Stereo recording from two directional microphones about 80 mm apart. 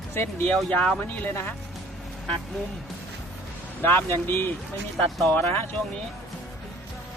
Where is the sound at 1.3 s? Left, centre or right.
Left.